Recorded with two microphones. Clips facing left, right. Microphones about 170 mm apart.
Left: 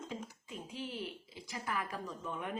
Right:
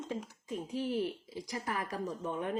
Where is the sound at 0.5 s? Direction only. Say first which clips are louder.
Right 10 dB; 45° right (ahead or behind).